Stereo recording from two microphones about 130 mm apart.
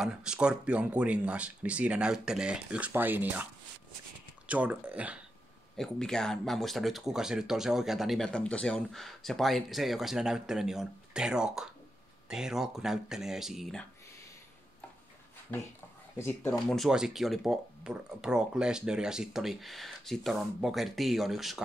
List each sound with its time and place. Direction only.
0.0 s speech: 5° right (ahead or behind)
4.5 s speech: 10° right (ahead or behind)
5.8 s speech: 5° left (ahead or behind)
16.2 s speech: 15° left (ahead or behind)
16.6 s speech: centre (ahead or behind)